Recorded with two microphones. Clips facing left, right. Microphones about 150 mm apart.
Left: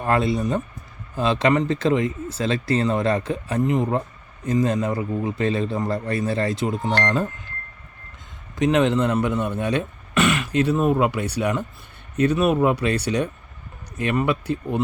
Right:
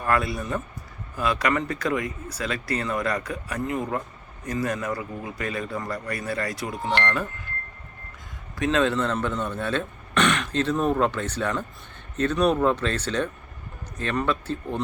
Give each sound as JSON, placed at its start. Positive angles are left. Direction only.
{"t": 0.0, "sound": "speech", "side_deg": 25}
{"t": 8.5, "sound": "speech", "side_deg": 20}